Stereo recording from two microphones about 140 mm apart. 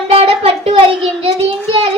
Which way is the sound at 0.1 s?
45° right (ahead or behind).